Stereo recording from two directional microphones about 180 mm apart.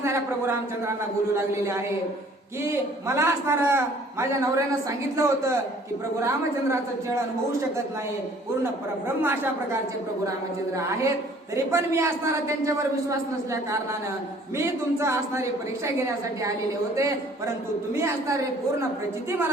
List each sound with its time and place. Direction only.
0.0 s a man's voice: 15° right (ahead or behind)
3.1 s a man's voice: 15° right (ahead or behind)
9.0 s a man's voice: 10° right (ahead or behind)
11.5 s a man's voice: 15° right (ahead or behind)
16.9 s a man's voice: 15° right (ahead or behind)